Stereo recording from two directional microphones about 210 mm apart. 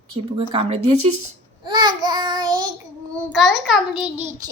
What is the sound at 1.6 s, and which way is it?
Babbling, 20° right (ahead or behind).